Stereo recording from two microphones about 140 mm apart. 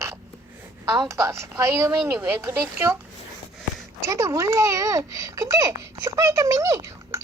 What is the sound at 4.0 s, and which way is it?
A child's voice, 20° right (ahead or behind).